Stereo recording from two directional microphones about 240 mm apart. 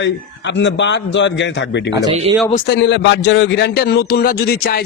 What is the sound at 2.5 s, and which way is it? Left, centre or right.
Speech, left.